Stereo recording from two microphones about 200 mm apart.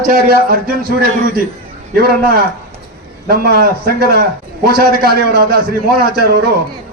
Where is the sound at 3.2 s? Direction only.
50° right (ahead or behind).